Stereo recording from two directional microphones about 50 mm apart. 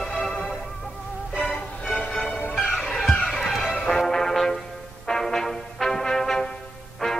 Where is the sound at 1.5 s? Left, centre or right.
Left.